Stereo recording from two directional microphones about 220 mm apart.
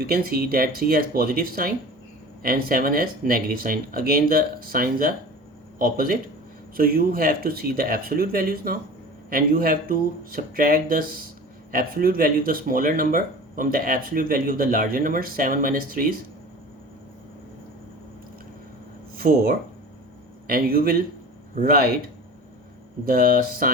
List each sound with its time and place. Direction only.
0.0 s speech: 40° right (ahead or behind)
19.1 s a man's voice: 40° right (ahead or behind)
23.0 s speech: 40° right (ahead or behind)